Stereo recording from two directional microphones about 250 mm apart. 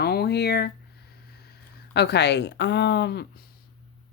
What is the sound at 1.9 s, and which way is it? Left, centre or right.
Speech, left.